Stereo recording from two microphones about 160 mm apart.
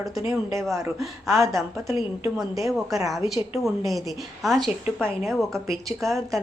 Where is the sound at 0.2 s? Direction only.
20° right (ahead or behind).